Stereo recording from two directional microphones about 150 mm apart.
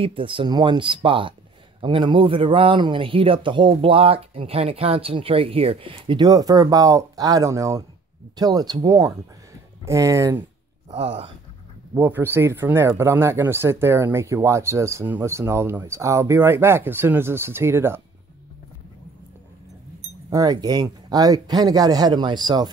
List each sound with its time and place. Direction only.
0.0 s speech: 35° right (ahead or behind); by 10.4 s 20° right (ahead or behind)
10.9 s speech: 45° right (ahead or behind)
11.9 s speech: 15° right (ahead or behind)
20.2 s speech: 25° right (ahead or behind)